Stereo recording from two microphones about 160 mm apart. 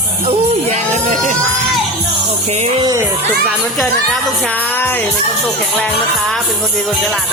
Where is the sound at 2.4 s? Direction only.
40° right (ahead or behind).